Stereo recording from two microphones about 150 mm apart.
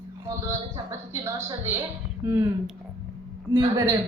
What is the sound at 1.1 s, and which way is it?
A woman's voice, 15° right (ahead or behind).